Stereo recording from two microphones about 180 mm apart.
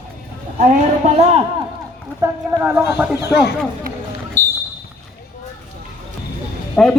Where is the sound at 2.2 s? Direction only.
15° right (ahead or behind).